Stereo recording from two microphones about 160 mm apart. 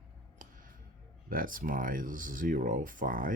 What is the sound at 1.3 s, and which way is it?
Speech, 60° right (ahead or behind).